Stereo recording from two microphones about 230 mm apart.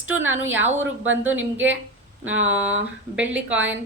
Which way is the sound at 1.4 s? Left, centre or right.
Right.